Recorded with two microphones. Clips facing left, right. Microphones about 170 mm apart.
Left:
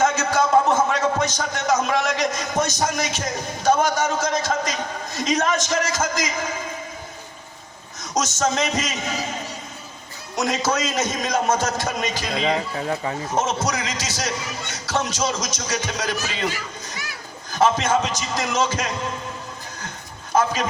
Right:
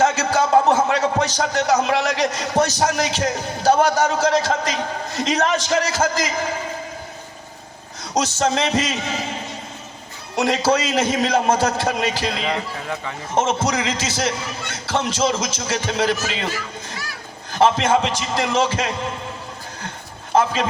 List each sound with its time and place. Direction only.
0.0 s a man's voice: 35° right (ahead or behind)
8.0 s a man's voice: 30° right (ahead or behind)
10.3 s a man's voice: 30° right (ahead or behind)
12.4 s speech: 35° left (ahead or behind)
13.3 s speech: 30° right (ahead or behind)
17.5 s speech: 30° right (ahead or behind)
20.3 s a man's voice: 30° right (ahead or behind)